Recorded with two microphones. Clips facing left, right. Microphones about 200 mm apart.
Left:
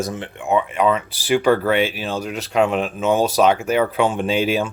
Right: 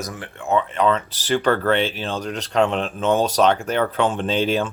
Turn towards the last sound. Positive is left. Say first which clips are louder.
# left 1 dB
turn(degrees=10)  # may be behind; listen again after turning